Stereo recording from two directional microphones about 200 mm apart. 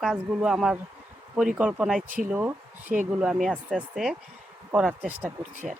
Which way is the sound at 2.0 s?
40° right (ahead or behind).